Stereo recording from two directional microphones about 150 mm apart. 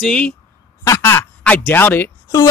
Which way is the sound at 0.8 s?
20° left (ahead or behind).